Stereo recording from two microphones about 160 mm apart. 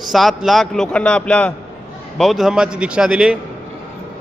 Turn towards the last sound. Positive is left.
turn(degrees=-5)  # may be behind; listen again after turning